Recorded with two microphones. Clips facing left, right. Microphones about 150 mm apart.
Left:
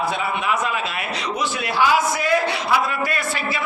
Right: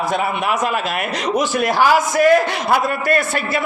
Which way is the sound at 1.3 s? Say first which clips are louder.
Right 6 dB; 45° right (ahead or behind).